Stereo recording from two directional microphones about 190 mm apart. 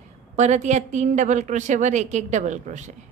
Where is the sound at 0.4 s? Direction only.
40° right (ahead or behind).